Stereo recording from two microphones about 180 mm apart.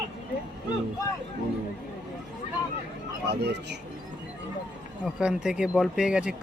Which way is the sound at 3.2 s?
65° right (ahead or behind).